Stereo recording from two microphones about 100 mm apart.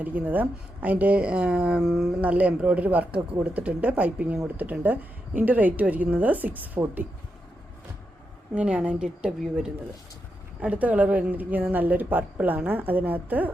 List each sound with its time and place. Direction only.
0.0 s speech: 15° right (ahead or behind)
2.2 s speech: 15° right (ahead or behind)
8.5 s speech: 10° right (ahead or behind)